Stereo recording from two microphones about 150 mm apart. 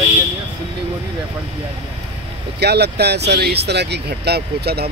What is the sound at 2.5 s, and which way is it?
Speech, 90° right.